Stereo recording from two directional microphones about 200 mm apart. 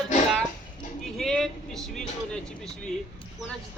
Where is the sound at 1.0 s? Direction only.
Centre (ahead or behind).